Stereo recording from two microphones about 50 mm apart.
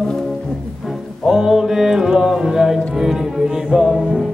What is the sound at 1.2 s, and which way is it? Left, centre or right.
Music, centre.